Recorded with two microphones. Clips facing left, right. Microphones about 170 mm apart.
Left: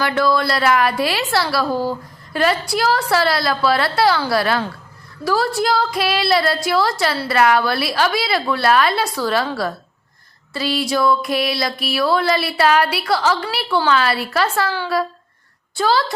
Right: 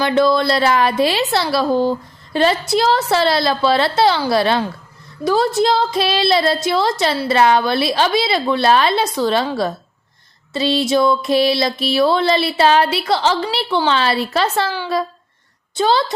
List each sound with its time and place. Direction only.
0.0 s a woman's voice: 25° right (ahead or behind)